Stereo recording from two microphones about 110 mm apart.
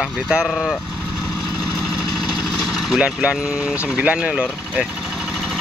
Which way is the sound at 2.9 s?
10° right (ahead or behind).